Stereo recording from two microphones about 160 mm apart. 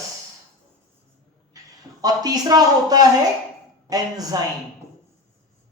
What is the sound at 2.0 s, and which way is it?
Speech, 25° right (ahead or behind).